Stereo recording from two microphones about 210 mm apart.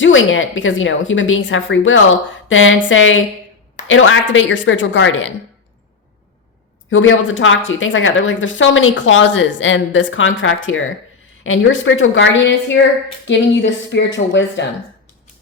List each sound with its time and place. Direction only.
0.0 s speech: 65° left (ahead or behind)
6.9 s speech: 65° left (ahead or behind)